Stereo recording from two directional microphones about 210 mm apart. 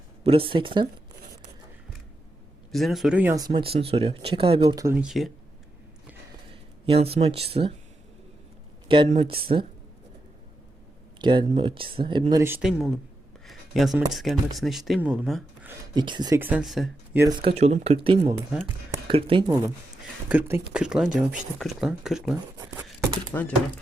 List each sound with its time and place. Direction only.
0.2 s speech: 25° right (ahead or behind)
2.7 s speech: centre (ahead or behind); by 4.8 s 25° right (ahead or behind)
4.8 s speech: 10° right (ahead or behind)
6.5 s speech: 25° right (ahead or behind)
8.9 s speech: 30° right (ahead or behind)
11.2 s speech: 20° right (ahead or behind)
12.6 s speech: centre (ahead or behind)
16.0 s speech: 20° right (ahead or behind); by 16.9 s centre (ahead or behind)
17.2 s speech: 20° right (ahead or behind); by 23.6 s 10° left (ahead or behind)